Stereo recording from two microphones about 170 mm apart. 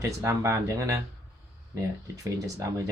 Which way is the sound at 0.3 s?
15° right (ahead or behind).